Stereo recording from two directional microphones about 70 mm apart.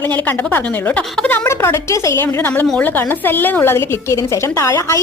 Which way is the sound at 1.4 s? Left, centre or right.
Left.